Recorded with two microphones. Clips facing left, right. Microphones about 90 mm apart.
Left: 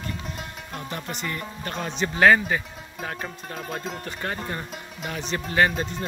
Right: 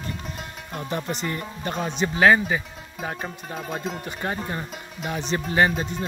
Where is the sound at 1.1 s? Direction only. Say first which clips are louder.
Right 2 dB; 25° right (ahead or behind).